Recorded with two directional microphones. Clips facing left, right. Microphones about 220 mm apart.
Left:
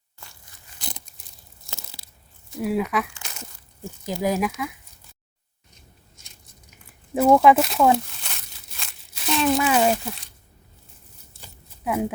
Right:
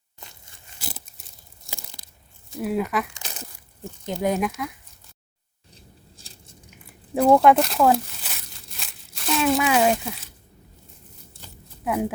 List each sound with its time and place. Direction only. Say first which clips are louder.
0.2 s crunch: right 2 dB; 20° right (ahead or behind)
0.8 s crumpling: even; 5° right (ahead or behind)
2.6 s speech: left 1 dB; centre (ahead or behind)
5.7 s a sound: right 5 dB; 30° right (ahead or behind)
7.1 s speech: even; centre (ahead or behind)
8.7 s crumpling: left 1 dB; centre (ahead or behind)
11.9 s speech: even; centre (ahead or behind)